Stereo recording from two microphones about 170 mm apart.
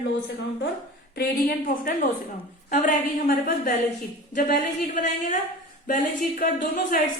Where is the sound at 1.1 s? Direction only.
65° left (ahead or behind).